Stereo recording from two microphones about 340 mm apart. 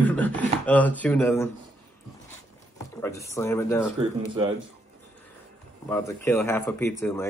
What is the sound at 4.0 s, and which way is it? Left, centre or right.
Speech, centre.